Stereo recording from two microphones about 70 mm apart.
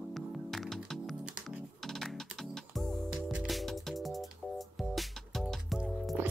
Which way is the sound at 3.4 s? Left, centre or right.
Centre.